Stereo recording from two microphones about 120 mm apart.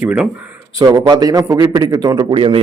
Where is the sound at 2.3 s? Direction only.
50° right (ahead or behind).